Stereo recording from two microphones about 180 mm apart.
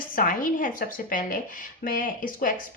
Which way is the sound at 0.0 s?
50° left (ahead or behind).